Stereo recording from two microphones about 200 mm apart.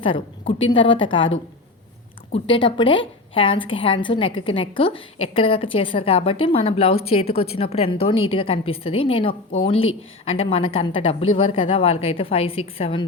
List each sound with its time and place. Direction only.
0.0 s a woman's voice: 25° left (ahead or behind)
9.7 s speech: 90° left
10.7 s a woman's voice: 25° left (ahead or behind)